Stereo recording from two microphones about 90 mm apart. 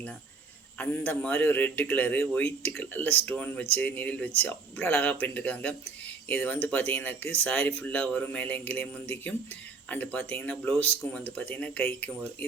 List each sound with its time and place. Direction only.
0.8 s a man's voice: 20° left (ahead or behind)